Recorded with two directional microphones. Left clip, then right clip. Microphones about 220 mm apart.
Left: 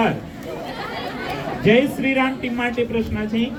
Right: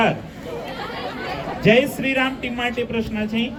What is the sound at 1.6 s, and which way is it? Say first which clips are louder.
A man's voice: even; 50° right (ahead or behind).